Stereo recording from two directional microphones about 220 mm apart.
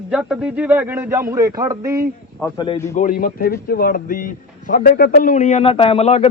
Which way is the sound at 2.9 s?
35° left (ahead or behind).